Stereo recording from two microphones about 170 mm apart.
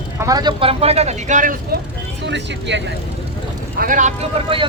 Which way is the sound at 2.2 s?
90° right.